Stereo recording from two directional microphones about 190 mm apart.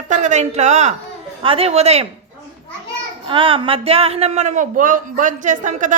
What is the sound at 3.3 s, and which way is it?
A man's voice, 30° right (ahead or behind).